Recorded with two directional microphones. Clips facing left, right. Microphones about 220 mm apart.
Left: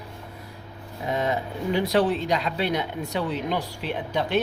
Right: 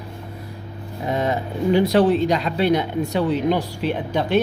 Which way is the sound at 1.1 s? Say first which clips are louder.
Right 3 dB; 45° right (ahead or behind).